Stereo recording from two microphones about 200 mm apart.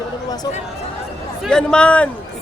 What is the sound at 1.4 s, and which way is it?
Speech, 5° left (ahead or behind).